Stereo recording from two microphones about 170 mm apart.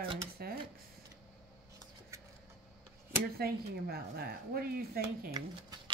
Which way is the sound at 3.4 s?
65° right (ahead or behind).